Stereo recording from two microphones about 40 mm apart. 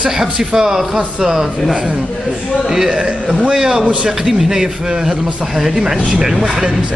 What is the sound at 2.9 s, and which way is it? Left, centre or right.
Speech, right.